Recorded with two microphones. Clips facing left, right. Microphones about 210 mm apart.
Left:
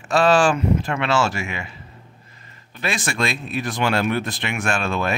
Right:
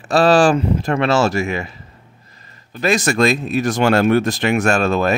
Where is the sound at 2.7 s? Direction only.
40° right (ahead or behind).